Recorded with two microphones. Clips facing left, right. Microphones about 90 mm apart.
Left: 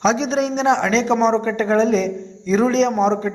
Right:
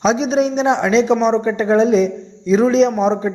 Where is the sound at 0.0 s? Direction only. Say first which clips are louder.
Right 3 dB; 10° right (ahead or behind).